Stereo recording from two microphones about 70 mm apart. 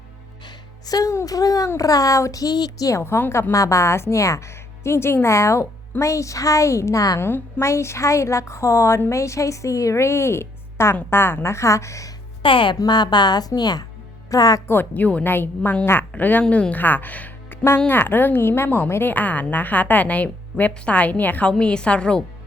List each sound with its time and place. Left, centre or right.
0.4 s music: left
1.1 s speech: left
3.0 s a woman's voice: left
3.5 s a woman's voice: left
7.2 s a woman's voice: left
12.8 s a woman's voice: left
14.3 s speech: left
14.7 s a woman's voice: left